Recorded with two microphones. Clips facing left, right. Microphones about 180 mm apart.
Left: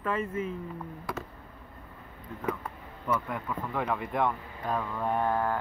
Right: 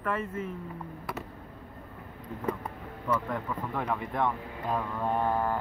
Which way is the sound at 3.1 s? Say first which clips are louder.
Right 1 dB; centre (ahead or behind).